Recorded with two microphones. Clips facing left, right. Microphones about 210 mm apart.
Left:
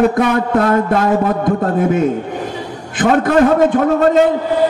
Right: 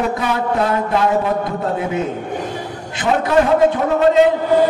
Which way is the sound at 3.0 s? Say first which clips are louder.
Left 4 dB; 50° left (ahead or behind).